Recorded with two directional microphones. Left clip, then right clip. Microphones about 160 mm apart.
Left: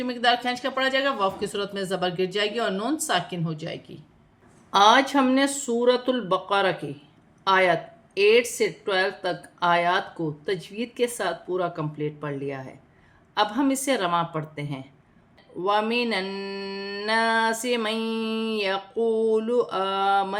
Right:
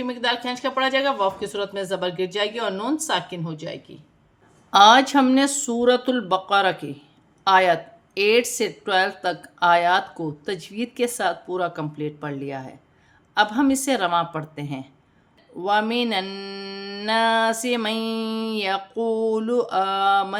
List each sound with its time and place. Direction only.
0.0 s speech: 10° right (ahead or behind)
4.7 s a woman's voice: 25° right (ahead or behind)